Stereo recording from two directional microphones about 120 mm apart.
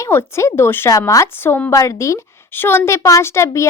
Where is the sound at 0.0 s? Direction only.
20° left (ahead or behind).